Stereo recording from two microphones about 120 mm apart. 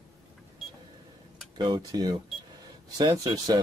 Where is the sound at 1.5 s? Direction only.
35° right (ahead or behind).